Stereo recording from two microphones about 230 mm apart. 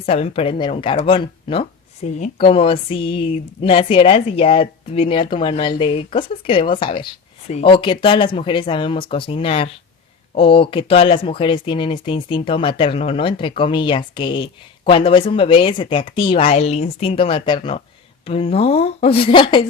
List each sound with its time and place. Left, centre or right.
0.0 s a woman's voice: left